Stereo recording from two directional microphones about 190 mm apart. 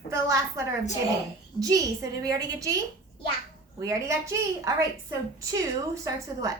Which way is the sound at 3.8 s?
15° right (ahead or behind).